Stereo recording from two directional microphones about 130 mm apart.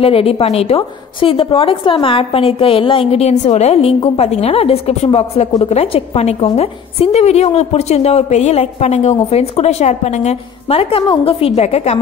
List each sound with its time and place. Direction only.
0.0 s a woman's voice: 45° left (ahead or behind)